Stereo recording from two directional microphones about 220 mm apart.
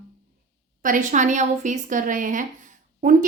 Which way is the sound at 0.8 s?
35° right (ahead or behind).